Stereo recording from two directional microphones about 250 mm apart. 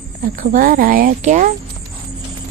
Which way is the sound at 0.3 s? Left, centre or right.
Right.